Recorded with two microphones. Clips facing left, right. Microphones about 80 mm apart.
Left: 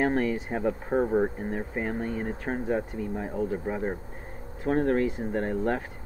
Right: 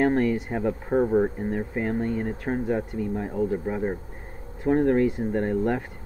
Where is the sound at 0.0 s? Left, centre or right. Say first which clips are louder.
Right 4 dB; centre.